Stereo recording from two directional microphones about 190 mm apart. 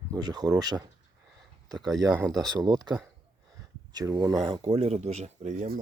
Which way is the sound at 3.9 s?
20° right (ahead or behind).